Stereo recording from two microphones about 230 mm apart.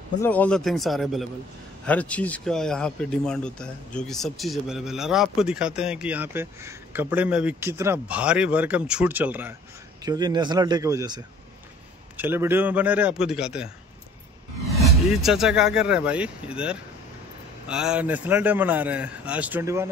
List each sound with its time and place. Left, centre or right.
0.2 s a man's voice: centre
14.8 s a man's voice: centre